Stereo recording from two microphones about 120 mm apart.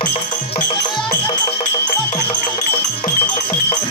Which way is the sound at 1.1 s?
35° left (ahead or behind).